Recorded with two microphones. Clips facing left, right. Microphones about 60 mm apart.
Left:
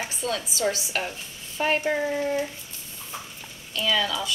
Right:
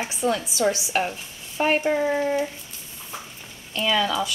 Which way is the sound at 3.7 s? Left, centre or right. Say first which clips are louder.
Right 3 dB; right.